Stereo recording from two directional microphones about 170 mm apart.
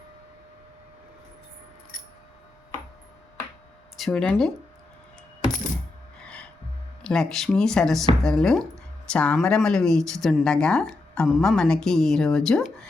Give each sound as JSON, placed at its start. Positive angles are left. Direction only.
{"t": 3.9, "sound": "speech", "side_deg": 0}
{"t": 6.1, "sound": "gasp", "side_deg": 5}
{"t": 7.0, "sound": "speech", "side_deg": 5}